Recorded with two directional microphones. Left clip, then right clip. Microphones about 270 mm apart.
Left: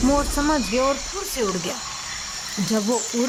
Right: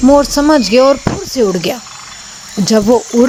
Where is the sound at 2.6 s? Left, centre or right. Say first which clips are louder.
Right 14 dB; right.